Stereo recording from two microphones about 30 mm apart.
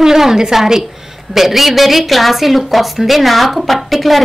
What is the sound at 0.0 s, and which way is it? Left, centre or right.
A woman's voice, centre.